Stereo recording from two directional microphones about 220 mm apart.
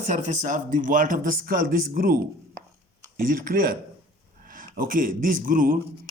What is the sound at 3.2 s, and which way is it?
Speech, 40° right (ahead or behind).